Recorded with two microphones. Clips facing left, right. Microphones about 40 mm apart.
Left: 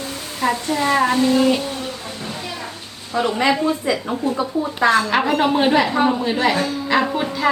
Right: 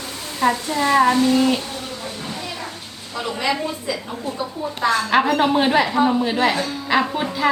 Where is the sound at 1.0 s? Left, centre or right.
Left.